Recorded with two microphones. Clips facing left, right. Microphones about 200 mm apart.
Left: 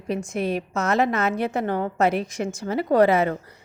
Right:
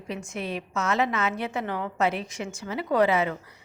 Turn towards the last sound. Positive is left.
turn(degrees=40)  # may be behind; listen again after turning